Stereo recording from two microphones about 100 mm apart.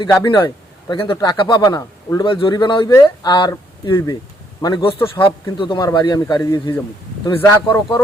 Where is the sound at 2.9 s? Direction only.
35° left (ahead or behind).